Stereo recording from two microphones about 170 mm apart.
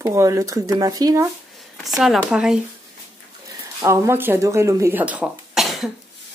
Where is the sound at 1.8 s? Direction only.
Centre (ahead or behind).